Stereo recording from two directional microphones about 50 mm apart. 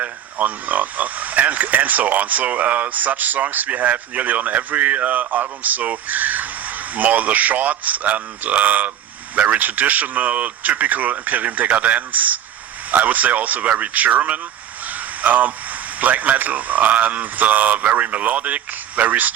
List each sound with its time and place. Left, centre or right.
0.0 s speech: right